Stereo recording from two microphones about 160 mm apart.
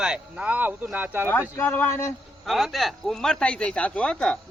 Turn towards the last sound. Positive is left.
turn(degrees=5)  # may be behind; listen again after turning